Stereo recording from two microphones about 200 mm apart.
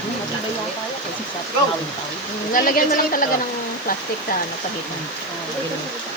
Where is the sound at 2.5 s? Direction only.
45° left (ahead or behind).